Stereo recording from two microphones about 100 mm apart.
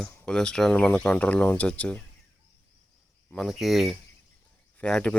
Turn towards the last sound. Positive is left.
turn(degrees=10)  # may be behind; listen again after turning